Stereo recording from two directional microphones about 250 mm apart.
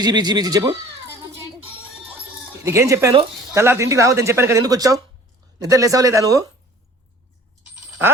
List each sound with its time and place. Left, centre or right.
0.0 s speech: centre
1.6 s music: centre
2.6 s speech: centre